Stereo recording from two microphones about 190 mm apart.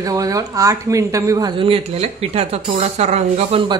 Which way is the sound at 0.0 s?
20° right (ahead or behind).